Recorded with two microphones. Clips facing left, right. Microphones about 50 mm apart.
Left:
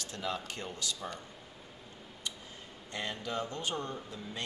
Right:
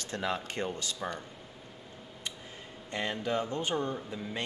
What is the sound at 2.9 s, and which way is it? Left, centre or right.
Speech, right.